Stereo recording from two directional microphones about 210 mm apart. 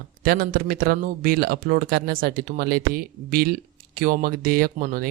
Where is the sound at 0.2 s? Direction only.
45° right (ahead or behind).